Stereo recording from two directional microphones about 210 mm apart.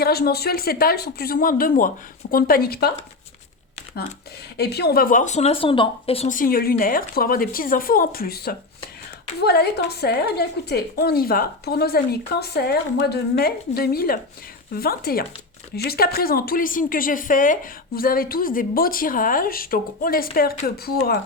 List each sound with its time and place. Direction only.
0.0 s speech: 50° left (ahead or behind)
4.5 s speech: 50° left (ahead or behind)